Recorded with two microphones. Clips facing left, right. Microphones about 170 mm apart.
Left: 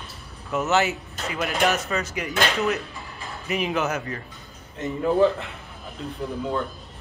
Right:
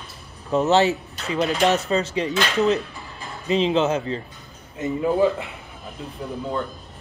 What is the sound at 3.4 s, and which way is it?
Speech, 25° right (ahead or behind).